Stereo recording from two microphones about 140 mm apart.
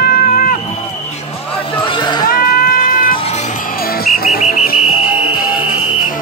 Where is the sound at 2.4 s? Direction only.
75° left (ahead or behind).